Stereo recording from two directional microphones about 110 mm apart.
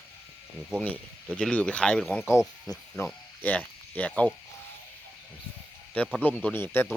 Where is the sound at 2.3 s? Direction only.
25° left (ahead or behind).